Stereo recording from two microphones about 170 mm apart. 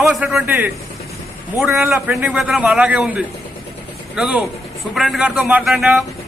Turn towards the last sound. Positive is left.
turn(degrees=0)  # may be behind; listen again after turning